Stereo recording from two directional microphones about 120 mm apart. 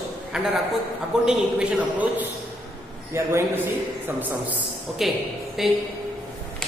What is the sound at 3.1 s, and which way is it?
Speech, 20° right (ahead or behind).